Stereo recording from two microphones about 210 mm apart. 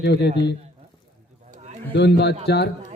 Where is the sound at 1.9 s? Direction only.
55° left (ahead or behind).